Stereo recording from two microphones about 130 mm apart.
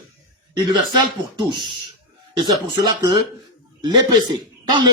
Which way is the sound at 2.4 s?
30° right (ahead or behind).